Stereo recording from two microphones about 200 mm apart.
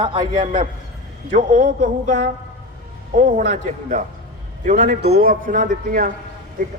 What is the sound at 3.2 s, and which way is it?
Speech, 40° right (ahead or behind).